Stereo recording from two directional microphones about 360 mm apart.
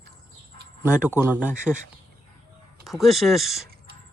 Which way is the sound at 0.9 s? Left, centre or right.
Centre.